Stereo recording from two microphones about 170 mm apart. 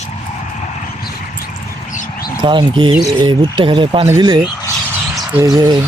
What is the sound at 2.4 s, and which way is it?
Speech, 30° right (ahead or behind).